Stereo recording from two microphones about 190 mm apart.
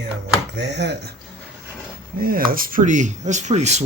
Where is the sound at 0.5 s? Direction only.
65° right (ahead or behind).